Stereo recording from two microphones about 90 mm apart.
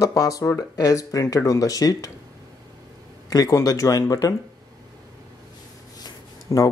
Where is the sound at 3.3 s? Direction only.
40° left (ahead or behind).